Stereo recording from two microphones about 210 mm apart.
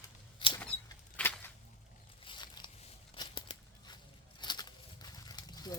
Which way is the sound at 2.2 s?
20° left (ahead or behind).